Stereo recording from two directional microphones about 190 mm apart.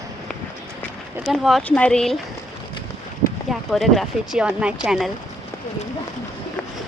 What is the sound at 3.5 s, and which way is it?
Speech, centre (ahead or behind).